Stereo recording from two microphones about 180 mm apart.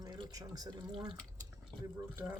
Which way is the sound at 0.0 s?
20° right (ahead or behind).